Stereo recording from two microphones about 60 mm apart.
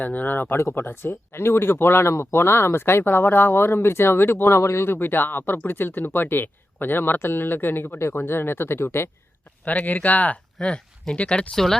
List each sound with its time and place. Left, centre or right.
0.0 s speech: left
0.5 s speech: left
4.4 s speech: left
9.6 s speech: left
10.6 s speech: centre